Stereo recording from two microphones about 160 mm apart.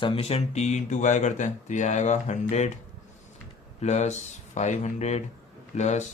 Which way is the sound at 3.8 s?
45° left (ahead or behind).